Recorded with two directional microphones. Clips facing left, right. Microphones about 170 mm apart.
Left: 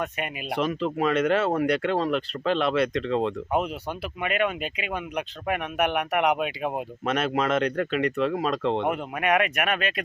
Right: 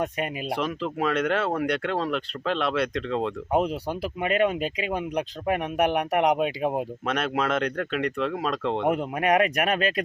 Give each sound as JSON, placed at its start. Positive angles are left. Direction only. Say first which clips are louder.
{"t": 0.0, "sound": "speech", "louder": "right 3 dB", "side_deg": -35}
{"t": 0.4, "sound": "speech", "louder": "left 6 dB", "side_deg": 0}
{"t": 3.5, "sound": "speech", "louder": "right 2 dB", "side_deg": -35}
{"t": 7.0, "sound": "speech", "louder": "left 4 dB", "side_deg": 0}
{"t": 8.9, "sound": "speech", "louder": "right 2 dB", "side_deg": -35}